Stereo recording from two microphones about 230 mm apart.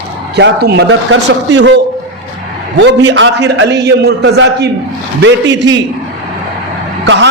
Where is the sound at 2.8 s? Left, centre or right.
Right.